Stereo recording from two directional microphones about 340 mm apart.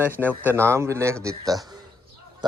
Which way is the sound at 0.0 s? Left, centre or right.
Centre.